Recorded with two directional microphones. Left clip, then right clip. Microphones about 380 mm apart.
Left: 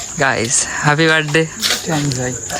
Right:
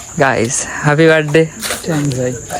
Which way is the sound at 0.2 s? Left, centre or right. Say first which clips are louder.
Right 3 dB; centre.